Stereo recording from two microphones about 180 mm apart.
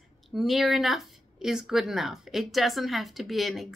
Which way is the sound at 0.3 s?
Centre (ahead or behind).